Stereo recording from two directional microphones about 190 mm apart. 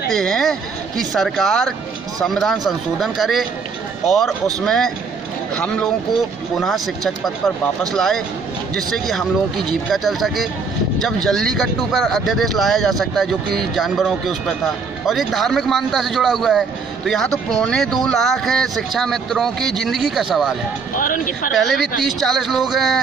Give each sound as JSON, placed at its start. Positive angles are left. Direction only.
{"t": 0.1, "sound": "a sound", "side_deg": 5}
{"t": 0.9, "sound": "speech", "side_deg": 0}
{"t": 20.9, "sound": "speech", "side_deg": 45}
{"t": 21.5, "sound": "speech", "side_deg": 0}